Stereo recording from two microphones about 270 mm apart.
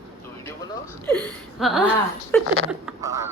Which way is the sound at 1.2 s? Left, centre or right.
Centre.